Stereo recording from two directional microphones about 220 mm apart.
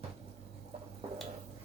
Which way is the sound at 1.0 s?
30° right (ahead or behind).